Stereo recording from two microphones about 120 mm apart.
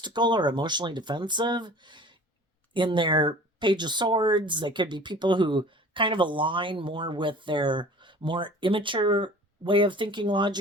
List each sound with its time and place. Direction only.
0.0 s speech: 40° right (ahead or behind)